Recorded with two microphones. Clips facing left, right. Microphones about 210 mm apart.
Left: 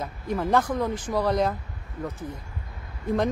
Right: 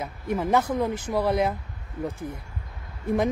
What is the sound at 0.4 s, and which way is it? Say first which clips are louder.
Speech: even; 10° right (ahead or behind).